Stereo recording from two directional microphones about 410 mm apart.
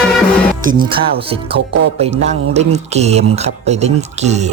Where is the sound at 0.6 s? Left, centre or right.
Centre.